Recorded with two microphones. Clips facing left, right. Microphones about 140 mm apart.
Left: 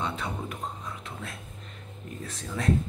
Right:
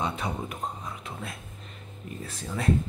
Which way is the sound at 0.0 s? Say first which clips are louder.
Right 2 dB; 15° right (ahead or behind).